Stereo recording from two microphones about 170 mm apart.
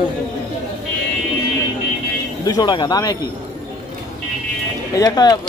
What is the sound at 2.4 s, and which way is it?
Speech, 20° left (ahead or behind).